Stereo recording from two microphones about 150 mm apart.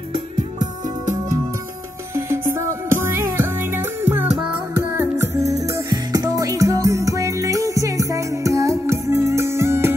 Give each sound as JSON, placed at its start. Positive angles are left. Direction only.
{"t": 0.8, "sound": "music", "side_deg": -60}
{"t": 2.1, "sound": "music", "side_deg": -20}